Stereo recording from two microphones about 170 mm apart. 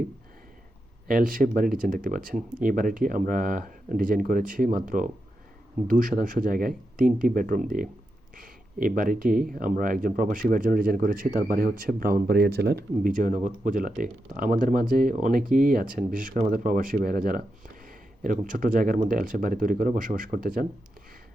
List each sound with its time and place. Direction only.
1.0 s speech: 55° right (ahead or behind)